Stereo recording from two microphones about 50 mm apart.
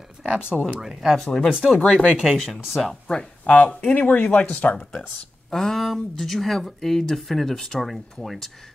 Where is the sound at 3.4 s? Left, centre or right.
Left.